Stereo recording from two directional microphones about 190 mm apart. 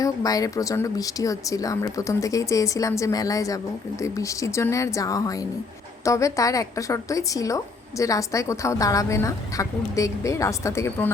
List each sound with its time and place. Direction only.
0.0 s a woman's voice: 20° left (ahead or behind)